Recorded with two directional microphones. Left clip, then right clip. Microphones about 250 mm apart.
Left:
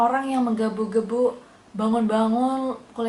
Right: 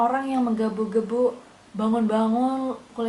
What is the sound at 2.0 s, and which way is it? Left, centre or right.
Speech, centre.